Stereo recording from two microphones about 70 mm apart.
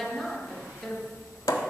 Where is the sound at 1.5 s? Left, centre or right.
Left.